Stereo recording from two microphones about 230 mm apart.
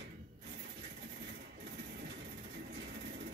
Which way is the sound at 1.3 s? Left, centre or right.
Right.